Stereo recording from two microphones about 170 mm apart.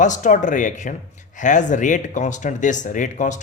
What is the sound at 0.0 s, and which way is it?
Speech, 45° left (ahead or behind).